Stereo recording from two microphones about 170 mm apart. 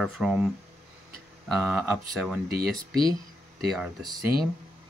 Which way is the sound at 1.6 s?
5° right (ahead or behind).